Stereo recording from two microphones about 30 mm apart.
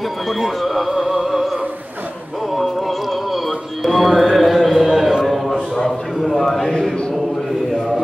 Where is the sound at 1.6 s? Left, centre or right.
Right.